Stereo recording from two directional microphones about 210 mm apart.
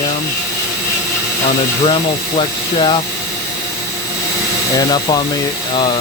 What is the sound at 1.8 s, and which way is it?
Speech, 25° left (ahead or behind).